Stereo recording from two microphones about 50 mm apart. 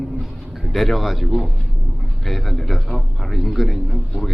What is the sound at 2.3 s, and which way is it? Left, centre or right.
A man's voice, centre.